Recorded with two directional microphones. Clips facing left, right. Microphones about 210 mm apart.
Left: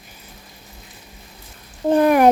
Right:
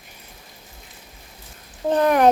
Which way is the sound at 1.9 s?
10° left (ahead or behind).